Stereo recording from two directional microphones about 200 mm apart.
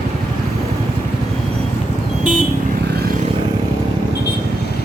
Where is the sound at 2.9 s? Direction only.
50° right (ahead or behind).